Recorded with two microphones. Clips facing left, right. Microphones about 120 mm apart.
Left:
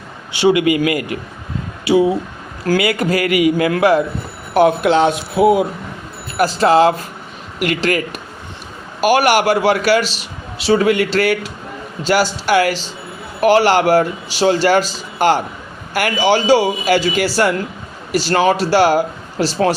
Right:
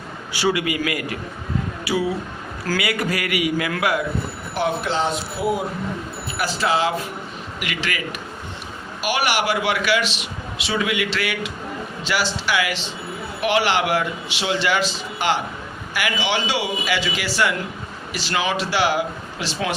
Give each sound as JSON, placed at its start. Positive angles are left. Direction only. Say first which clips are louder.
{"t": 0.3, "sound": "a man's voice", "louder": "left 8 dB", "side_deg": 25}
{"t": 4.5, "sound": "a man's voice", "louder": "left 10 dB", "side_deg": 60}
{"t": 5.4, "sound": "a man's voice", "louder": "left 11 dB", "side_deg": 80}
{"t": 6.3, "sound": "a man's voice", "louder": "left 9 dB", "side_deg": 40}